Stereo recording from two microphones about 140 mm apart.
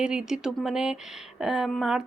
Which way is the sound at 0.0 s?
5° right (ahead or behind).